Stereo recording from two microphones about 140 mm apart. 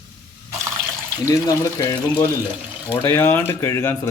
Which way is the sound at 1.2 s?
25° left (ahead or behind).